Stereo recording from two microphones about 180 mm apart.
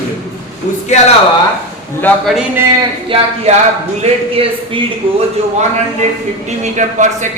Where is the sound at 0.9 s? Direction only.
40° left (ahead or behind).